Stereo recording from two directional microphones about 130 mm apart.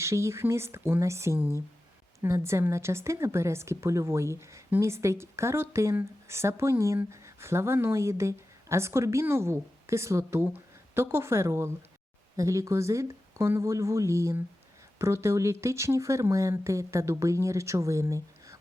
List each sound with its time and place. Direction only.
0.0 s a woman's voice: 20° right (ahead or behind)